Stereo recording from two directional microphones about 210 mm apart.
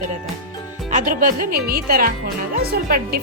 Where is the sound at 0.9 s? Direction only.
40° right (ahead or behind).